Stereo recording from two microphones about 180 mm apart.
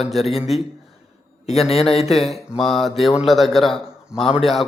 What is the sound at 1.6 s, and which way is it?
Speech, 35° left (ahead or behind).